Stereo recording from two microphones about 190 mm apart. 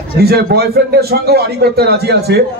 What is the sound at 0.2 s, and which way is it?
A man's voice, 55° right (ahead or behind).